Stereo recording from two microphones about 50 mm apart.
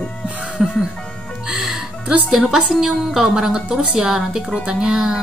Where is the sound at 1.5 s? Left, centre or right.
Centre.